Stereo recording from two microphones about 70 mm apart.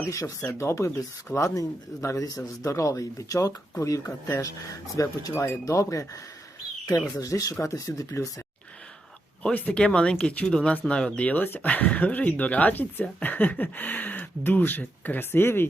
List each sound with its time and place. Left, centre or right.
0.1 s a man's voice: left
0.6 s a man's voice: left
3.8 s a man's voice: left
6.8 s speech: left
9.4 s speech: centre